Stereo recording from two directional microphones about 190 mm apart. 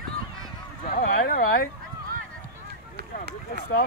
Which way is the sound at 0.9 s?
50° left (ahead or behind).